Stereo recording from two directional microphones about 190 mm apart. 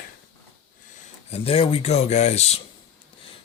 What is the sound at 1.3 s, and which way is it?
Speech, 30° left (ahead or behind).